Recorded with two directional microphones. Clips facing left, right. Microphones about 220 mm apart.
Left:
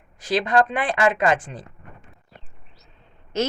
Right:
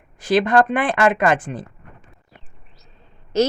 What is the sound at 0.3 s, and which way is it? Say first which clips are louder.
Speech: right 4 dB; 50° right (ahead or behind).